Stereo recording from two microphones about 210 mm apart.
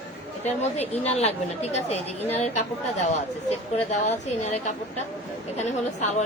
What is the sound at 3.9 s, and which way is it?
A woman's voice, 35° left (ahead or behind).